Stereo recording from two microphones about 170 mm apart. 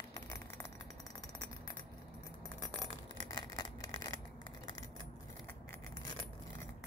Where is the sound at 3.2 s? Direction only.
25° left (ahead or behind).